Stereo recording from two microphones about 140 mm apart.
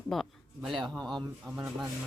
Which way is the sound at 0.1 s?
Centre (ahead or behind).